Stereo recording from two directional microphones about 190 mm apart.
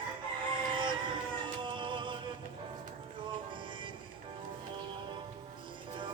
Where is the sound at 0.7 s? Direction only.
25° right (ahead or behind).